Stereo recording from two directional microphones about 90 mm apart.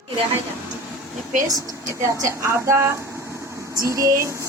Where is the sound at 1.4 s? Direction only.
40° right (ahead or behind).